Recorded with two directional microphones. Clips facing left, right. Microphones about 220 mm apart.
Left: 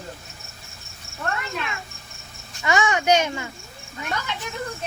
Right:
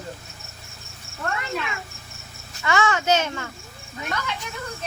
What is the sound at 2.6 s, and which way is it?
Speech, 15° left (ahead or behind).